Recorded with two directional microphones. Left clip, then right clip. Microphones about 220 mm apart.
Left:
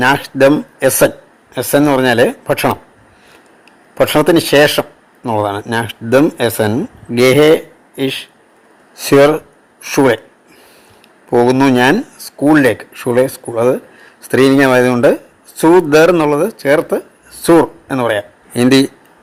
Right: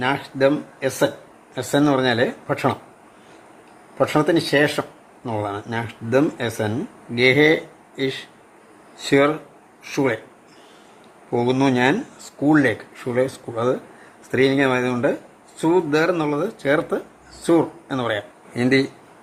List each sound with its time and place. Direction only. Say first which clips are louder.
0.0 s speech: left 9 dB; 35° left (ahead or behind)
1.5 s speech: left 7 dB; 20° left (ahead or behind)
3.9 s speech: left 8 dB; 30° left (ahead or behind)
11.3 s speech: left 9 dB; 30° left (ahead or behind)
14.3 s speech: left 9 dB; 35° left (ahead or behind)
16.6 s speech: left 8 dB; 20° left (ahead or behind)